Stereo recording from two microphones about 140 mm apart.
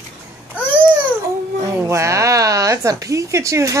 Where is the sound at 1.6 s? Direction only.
20° right (ahead or behind).